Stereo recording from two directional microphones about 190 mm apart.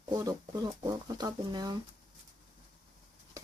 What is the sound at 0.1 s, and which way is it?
Speech, 20° right (ahead or behind).